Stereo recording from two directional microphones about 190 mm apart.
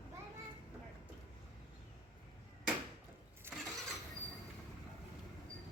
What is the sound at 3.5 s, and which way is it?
Vehicle, 10° right (ahead or behind).